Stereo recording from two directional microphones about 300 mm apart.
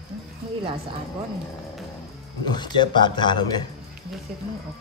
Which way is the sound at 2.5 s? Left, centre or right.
Centre.